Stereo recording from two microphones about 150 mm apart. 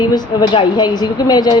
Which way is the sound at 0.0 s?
25° left (ahead or behind).